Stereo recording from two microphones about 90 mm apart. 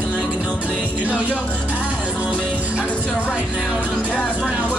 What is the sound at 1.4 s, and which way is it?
Music, 15° left (ahead or behind).